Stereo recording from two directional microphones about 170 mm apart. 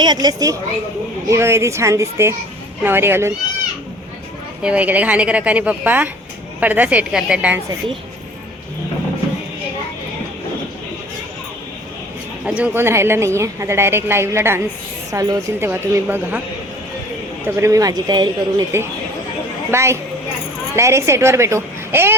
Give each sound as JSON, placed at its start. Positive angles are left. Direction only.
{"t": 0.0, "sound": "a man's voice", "side_deg": -25}
{"t": 4.6, "sound": "a woman's voice", "side_deg": -10}
{"t": 12.5, "sound": "a woman's voice", "side_deg": -5}
{"t": 17.4, "sound": "a man's voice", "side_deg": -20}